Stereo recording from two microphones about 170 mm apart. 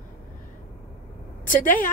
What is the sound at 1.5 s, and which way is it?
Speech, 50° left (ahead or behind).